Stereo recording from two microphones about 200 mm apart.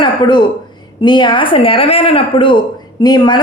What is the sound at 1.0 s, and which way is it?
A woman's voice, 25° left (ahead or behind).